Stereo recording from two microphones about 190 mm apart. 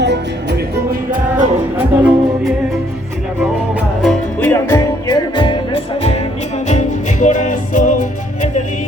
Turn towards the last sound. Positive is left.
turn(degrees=45)  # may be behind; listen again after turning